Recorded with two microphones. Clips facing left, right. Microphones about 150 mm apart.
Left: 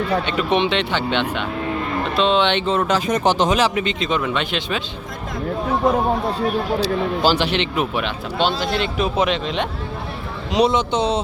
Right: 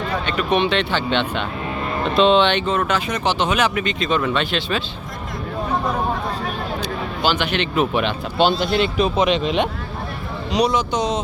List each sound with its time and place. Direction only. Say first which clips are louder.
0.3 s speech: even; 20° left (ahead or behind)
2.1 s speech: right 4 dB; centre (ahead or behind)
2.4 s speech: even; 25° left (ahead or behind)
6.7 s speech: left 6 dB; 35° left (ahead or behind)
7.8 s speech: right 3 dB; 5° left (ahead or behind); by 9.6 s 15° right (ahead or behind)
10.6 s a man's voice: left 2 dB; 25° left (ahead or behind)